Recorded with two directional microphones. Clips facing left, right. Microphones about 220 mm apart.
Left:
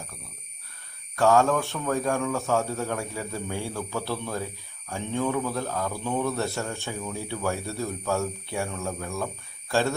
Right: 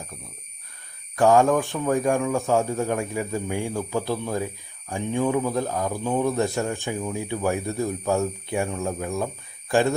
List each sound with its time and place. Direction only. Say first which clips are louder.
1.1 s speech: right 3 dB; 15° right (ahead or behind)